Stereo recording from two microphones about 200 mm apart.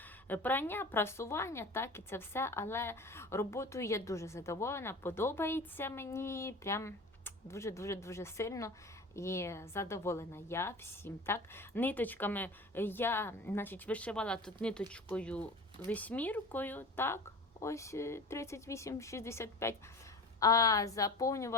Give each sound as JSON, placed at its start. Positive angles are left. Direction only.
{"t": 0.3, "sound": "a woman's voice", "side_deg": 10}